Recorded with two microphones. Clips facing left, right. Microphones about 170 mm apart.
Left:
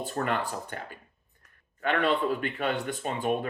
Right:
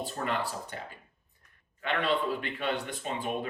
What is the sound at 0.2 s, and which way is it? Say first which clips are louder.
Speech: left 4 dB; 55° left (ahead or behind).